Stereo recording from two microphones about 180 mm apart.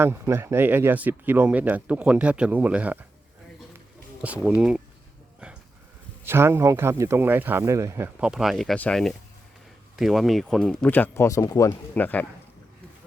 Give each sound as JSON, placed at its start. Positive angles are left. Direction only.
{"t": 0.0, "sound": "speech", "side_deg": -15}
{"t": 4.4, "sound": "speech", "side_deg": -5}
{"t": 6.2, "sound": "speech", "side_deg": -15}